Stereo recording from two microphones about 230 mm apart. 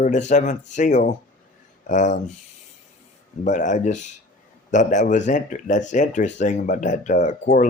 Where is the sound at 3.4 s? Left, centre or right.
Left.